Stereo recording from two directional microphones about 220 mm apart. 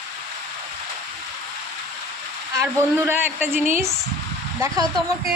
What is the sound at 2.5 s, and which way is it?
A man's voice, 10° right (ahead or behind).